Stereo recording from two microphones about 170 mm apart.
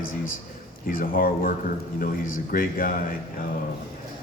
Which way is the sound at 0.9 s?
55° left (ahead or behind).